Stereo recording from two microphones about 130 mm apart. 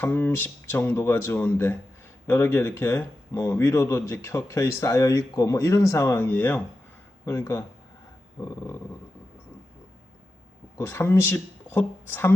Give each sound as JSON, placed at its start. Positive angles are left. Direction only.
{"t": 0.0, "sound": "speech", "side_deg": 20}
{"t": 10.8, "sound": "speech", "side_deg": 20}